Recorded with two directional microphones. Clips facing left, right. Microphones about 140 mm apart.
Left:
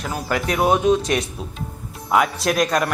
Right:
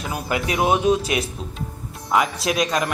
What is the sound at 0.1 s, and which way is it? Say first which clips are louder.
A man's voice: left 1 dB; 10° right (ahead or behind).